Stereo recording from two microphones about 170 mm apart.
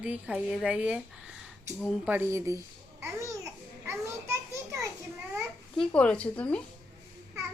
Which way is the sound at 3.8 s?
15° right (ahead or behind).